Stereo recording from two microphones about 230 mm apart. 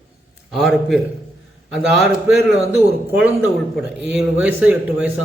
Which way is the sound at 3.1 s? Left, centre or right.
Centre.